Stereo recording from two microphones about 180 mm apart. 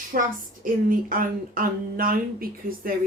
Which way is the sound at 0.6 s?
50° right (ahead or behind).